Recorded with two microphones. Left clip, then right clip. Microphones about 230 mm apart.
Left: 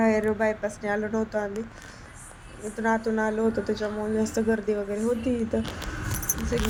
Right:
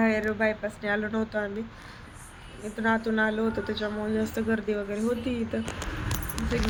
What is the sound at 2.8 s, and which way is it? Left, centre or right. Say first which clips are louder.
Speech: even; centre.